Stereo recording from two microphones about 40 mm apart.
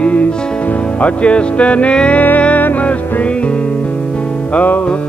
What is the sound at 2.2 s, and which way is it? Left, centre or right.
Music, left.